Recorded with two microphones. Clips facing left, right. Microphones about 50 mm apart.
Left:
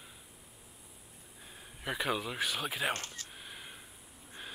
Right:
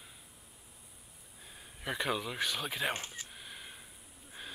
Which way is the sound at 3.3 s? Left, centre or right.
Centre.